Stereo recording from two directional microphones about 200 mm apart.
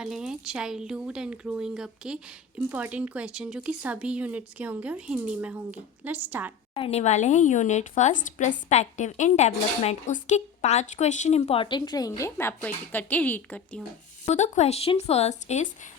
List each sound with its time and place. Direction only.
0.0 s speech: 5° right (ahead or behind)
6.7 s speech: 30° left (ahead or behind); by 13.8 s 10° left (ahead or behind)
14.3 s speech: 35° left (ahead or behind)